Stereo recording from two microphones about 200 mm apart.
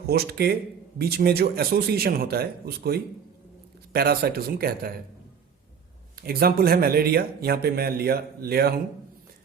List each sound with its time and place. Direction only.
0.1 s speech: 50° right (ahead or behind)
6.2 s speech: 50° right (ahead or behind)